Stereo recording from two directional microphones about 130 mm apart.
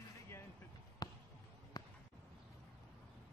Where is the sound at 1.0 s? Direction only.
30° left (ahead or behind).